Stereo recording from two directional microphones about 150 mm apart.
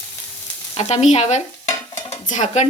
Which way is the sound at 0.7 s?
45° left (ahead or behind).